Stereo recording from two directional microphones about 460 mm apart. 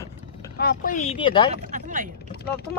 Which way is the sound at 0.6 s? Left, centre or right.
Centre.